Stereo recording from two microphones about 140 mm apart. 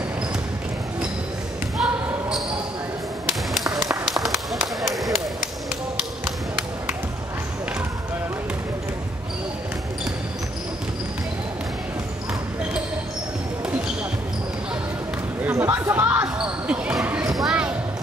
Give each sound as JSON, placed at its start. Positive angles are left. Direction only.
{"t": 1.8, "sound": "basketball bounce", "side_deg": -5}
{"t": 3.6, "sound": "a sound", "side_deg": -25}
{"t": 3.9, "sound": "run", "side_deg": 0}
{"t": 4.5, "sound": "basketball bounce", "side_deg": 0}
{"t": 6.2, "sound": "a sound", "side_deg": -10}
{"t": 15.4, "sound": "basketball bounce", "side_deg": -15}